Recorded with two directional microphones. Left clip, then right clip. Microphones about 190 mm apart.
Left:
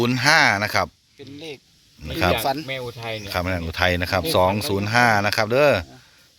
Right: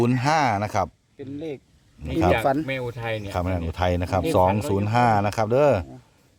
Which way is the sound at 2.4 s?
50° right (ahead or behind).